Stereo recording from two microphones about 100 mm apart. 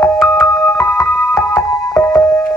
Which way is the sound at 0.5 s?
40° left (ahead or behind).